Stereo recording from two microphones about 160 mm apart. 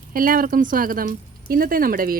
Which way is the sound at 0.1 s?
65° right (ahead or behind).